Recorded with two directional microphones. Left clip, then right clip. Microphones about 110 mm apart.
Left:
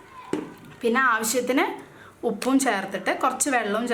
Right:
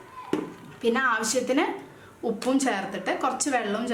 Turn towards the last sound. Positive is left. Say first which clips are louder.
# left 3 dB
turn(degrees=25)  # may be behind; listen again after turning